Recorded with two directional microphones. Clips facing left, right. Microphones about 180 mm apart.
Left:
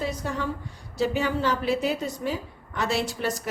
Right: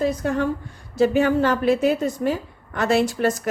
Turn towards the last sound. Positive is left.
turn(degrees=-50)  # may be behind; listen again after turning